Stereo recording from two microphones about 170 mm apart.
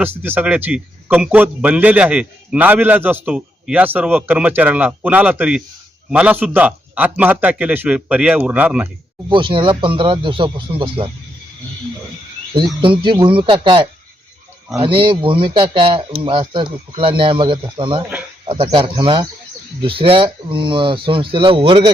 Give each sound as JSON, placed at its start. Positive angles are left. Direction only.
{"t": 0.0, "sound": "a man's voice", "side_deg": -10}
{"t": 9.3, "sound": "speech", "side_deg": -30}
{"t": 12.5, "sound": "speech", "side_deg": -30}